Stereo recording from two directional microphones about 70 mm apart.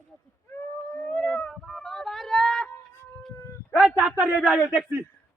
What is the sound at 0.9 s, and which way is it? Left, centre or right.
Cat, centre.